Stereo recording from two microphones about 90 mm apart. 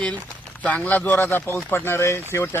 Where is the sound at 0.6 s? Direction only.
15° left (ahead or behind).